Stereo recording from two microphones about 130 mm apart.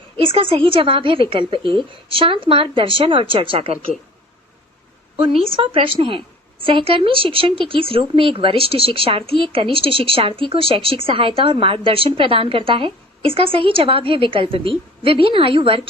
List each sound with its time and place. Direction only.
0.2 s speech: 45° right (ahead or behind)
5.1 s speech: 45° right (ahead or behind)